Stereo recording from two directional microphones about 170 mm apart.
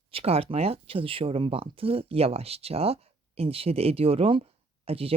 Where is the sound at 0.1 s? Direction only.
35° right (ahead or behind).